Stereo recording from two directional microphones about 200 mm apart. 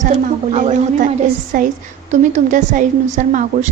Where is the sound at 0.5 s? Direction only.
40° right (ahead or behind).